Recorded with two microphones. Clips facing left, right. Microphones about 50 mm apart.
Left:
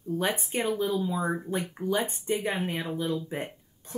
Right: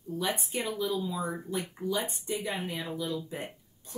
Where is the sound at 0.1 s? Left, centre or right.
Left.